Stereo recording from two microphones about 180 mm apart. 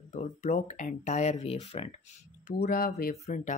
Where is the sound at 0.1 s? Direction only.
40° left (ahead or behind).